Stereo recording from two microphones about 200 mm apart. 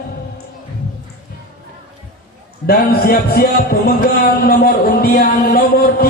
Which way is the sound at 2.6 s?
50° left (ahead or behind).